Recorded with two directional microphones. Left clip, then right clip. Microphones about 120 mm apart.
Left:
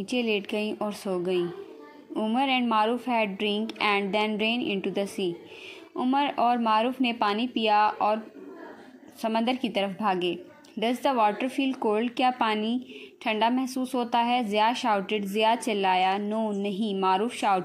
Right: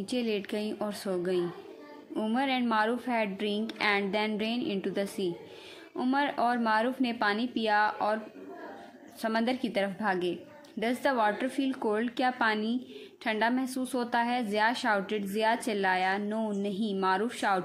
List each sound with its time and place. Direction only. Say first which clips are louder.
0.1 s a woman's voice: left 5 dB; 15° left (ahead or behind)
9.2 s a woman's voice: left 3 dB; 15° left (ahead or behind)